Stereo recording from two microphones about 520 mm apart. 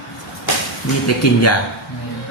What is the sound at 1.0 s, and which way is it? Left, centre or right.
Speech, left.